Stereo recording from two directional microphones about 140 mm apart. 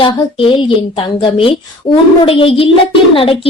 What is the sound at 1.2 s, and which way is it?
A woman's voice, 40° left (ahead or behind).